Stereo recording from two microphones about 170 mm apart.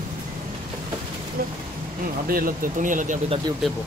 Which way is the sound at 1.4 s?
60° right (ahead or behind).